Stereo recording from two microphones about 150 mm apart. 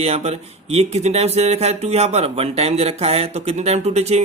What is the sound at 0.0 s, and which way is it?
Speech, 45° right (ahead or behind).